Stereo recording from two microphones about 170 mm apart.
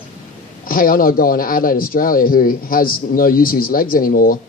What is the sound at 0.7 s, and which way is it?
Speech, 55° left (ahead or behind).